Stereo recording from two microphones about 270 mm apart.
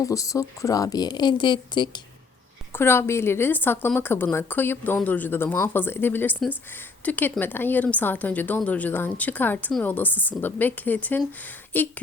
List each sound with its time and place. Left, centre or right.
0.0 s a woman's voice: centre